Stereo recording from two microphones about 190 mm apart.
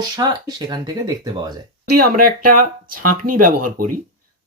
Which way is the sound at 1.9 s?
50° right (ahead or behind).